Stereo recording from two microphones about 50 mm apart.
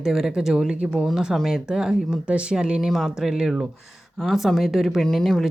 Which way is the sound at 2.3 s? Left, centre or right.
Right.